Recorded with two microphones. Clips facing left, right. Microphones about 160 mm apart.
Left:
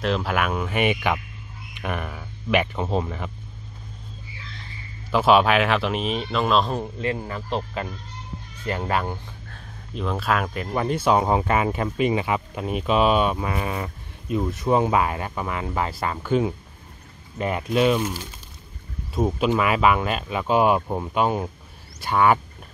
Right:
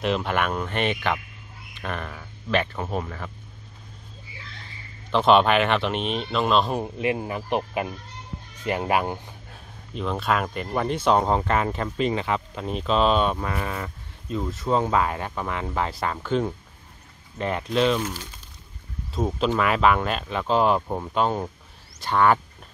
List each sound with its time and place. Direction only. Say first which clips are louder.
0.0 s speech: even; centre (ahead or behind); by 3.3 s 20° left (ahead or behind)
5.1 s speech: even; 5° left (ahead or behind)
6.8 s speech: right 1 dB; 15° right (ahead or behind)
9.9 s speech: even; centre (ahead or behind)